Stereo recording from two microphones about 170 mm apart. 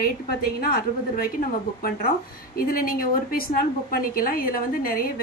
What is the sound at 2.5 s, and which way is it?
A woman's voice, 60° left (ahead or behind).